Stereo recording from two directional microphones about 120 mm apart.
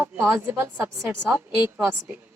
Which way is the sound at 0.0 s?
20° right (ahead or behind).